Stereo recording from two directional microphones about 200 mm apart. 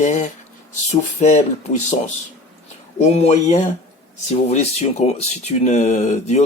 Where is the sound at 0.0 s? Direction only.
35° left (ahead or behind).